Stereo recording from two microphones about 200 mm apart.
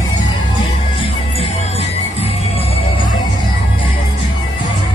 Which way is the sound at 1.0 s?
30° left (ahead or behind).